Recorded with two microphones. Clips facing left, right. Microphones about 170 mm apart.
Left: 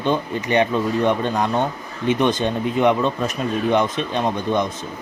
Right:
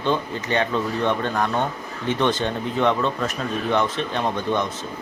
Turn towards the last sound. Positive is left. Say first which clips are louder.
# left 2 dB
turn(degrees=15)  # may be behind; listen again after turning